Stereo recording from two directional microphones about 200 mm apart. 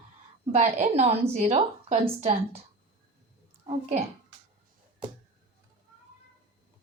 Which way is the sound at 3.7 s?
35° right (ahead or behind).